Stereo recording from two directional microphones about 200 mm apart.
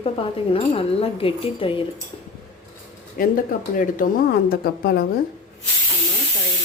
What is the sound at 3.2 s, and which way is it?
Speech, 45° left (ahead or behind).